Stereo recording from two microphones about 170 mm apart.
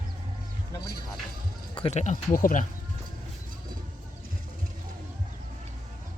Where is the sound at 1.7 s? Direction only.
35° left (ahead or behind); by 2.6 s 55° left (ahead or behind).